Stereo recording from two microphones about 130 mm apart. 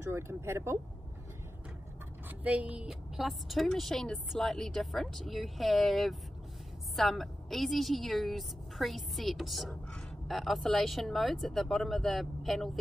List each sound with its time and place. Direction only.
0.0 s speech: 20° right (ahead or behind)
2.2 s a woman's voice: 10° right (ahead or behind)